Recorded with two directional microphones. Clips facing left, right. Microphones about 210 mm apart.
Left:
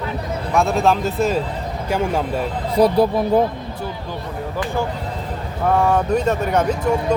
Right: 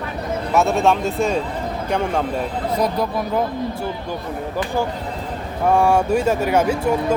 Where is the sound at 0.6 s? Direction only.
Centre (ahead or behind).